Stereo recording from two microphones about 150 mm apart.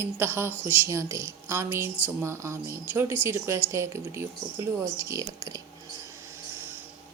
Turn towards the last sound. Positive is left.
turn(degrees=-25)  # may be behind; listen again after turning